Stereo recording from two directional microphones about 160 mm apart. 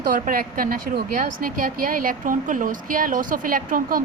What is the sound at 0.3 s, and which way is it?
Speech, 65° right (ahead or behind).